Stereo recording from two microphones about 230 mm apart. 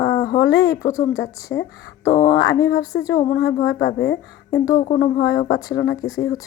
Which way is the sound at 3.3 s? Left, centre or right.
Left.